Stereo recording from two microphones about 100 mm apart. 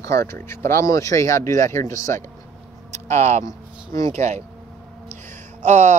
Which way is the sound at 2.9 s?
90° right.